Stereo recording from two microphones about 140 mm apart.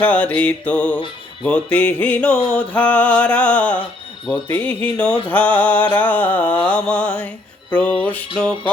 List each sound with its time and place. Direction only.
0.0 s music: 10° left (ahead or behind)